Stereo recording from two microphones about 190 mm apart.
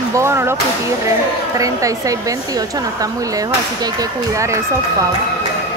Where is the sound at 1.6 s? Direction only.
15° right (ahead or behind).